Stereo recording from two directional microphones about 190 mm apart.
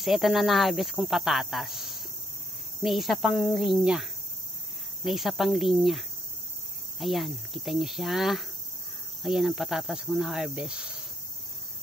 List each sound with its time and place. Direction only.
0.0 s speech: centre (ahead or behind)